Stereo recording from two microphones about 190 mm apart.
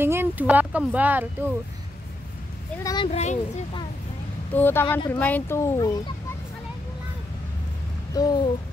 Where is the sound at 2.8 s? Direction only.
20° left (ahead or behind).